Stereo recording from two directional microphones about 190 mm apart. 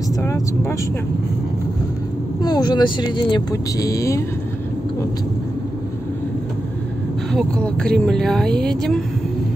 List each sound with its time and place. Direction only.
0.2 s speech: 15° left (ahead or behind)
2.4 s speech: 20° left (ahead or behind)
7.3 s speech: 5° left (ahead or behind)